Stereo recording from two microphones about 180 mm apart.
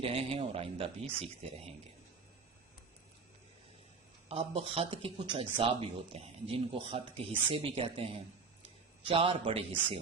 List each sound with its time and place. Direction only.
0.0 s speech: 30° right (ahead or behind)
4.3 s speech: 35° right (ahead or behind)